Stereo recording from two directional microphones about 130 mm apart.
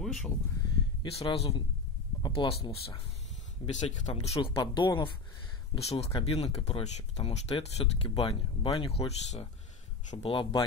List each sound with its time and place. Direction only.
0.0 s a sound: centre (ahead or behind)
1.1 s speech: 50° left (ahead or behind)
5.8 s speech: 55° left (ahead or behind)